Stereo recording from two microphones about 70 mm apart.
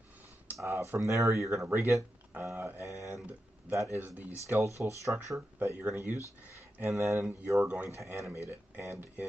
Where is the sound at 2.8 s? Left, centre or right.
Right.